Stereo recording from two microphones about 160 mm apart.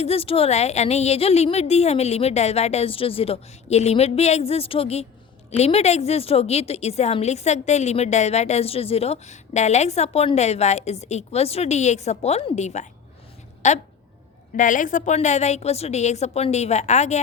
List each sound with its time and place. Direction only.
0.0 s a woman's voice: 40° left (ahead or behind)